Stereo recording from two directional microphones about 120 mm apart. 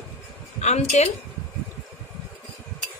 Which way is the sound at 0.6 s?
70° left (ahead or behind).